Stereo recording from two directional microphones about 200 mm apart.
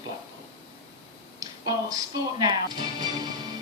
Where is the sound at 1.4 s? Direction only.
20° right (ahead or behind).